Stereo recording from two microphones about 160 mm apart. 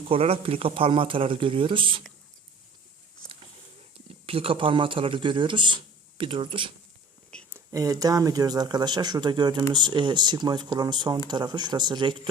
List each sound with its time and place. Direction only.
0.1 s speech: 35° right (ahead or behind)
3.9 s speech: 35° right (ahead or behind)
7.5 s speech: 20° right (ahead or behind)